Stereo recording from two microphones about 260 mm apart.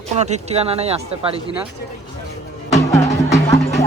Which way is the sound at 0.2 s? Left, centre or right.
Right.